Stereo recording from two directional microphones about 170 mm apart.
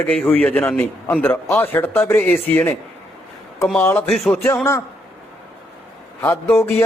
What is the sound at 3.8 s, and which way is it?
Speech, 10° left (ahead or behind).